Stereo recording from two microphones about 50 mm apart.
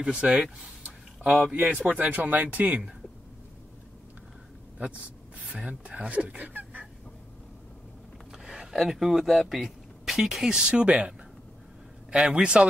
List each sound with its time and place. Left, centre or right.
0.0 s a man's voice: right
1.4 s a man's voice: centre
1.9 s speech: right
5.4 s speech: right
8.3 s a sound: centre
8.7 s a man's voice: centre